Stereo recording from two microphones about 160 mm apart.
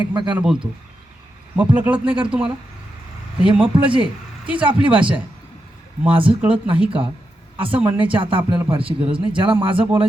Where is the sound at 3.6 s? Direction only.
30° right (ahead or behind).